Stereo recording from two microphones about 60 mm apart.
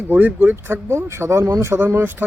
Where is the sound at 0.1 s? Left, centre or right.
Right.